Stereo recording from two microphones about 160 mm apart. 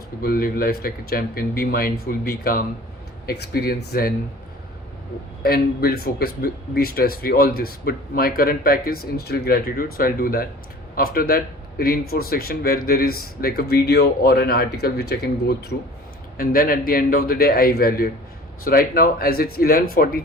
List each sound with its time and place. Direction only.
0.2 s speech: 70° left (ahead or behind)
3.2 s speech: 85° left
5.4 s speech: 70° left (ahead or behind)
16.4 s speech: 65° left (ahead or behind)